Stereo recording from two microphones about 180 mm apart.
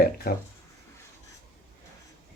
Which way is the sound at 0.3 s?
60° left (ahead or behind).